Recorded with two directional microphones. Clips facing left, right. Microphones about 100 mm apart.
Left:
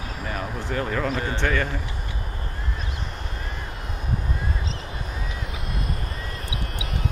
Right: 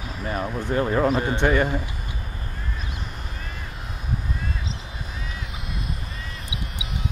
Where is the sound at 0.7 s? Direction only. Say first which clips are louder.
Right 5 dB; 25° right (ahead or behind).